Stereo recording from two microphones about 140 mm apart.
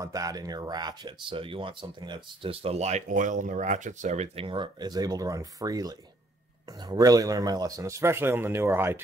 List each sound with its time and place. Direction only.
0.0 s speech: 25° right (ahead or behind); by 4.5 s 55° right (ahead or behind)
4.5 s speech: 30° right (ahead or behind); by 9.0 s 15° right (ahead or behind)